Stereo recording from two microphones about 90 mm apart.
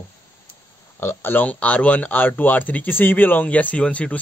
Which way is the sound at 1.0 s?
25° left (ahead or behind).